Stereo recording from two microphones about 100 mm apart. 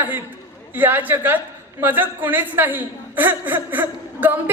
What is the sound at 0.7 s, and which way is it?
A woman's voice, 20° right (ahead or behind).